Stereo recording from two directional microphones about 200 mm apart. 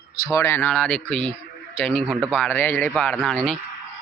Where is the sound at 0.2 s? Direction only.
15° left (ahead or behind).